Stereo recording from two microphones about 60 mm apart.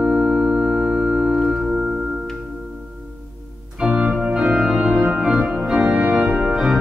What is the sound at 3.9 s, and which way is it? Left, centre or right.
Organ, right.